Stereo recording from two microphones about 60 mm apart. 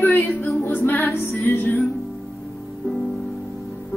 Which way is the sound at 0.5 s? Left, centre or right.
Left.